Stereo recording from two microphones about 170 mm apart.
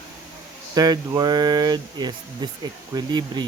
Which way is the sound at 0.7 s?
20° right (ahead or behind).